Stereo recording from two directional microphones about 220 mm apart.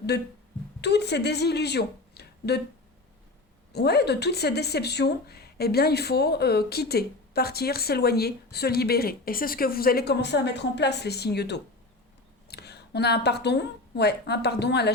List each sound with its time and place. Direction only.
0.1 s a woman's voice: 50° left (ahead or behind)
3.7 s speech: 45° left (ahead or behind)